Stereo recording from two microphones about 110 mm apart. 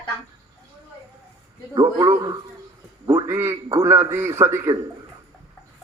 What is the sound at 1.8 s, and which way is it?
A man's voice, 40° right (ahead or behind).